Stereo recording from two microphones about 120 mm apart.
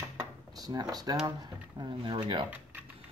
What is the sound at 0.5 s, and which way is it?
Speech, 35° right (ahead or behind).